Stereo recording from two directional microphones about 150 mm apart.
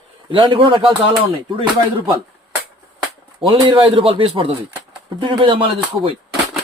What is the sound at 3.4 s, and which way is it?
Speech, 35° right (ahead or behind).